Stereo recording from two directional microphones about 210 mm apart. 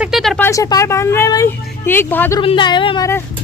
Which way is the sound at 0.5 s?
15° left (ahead or behind).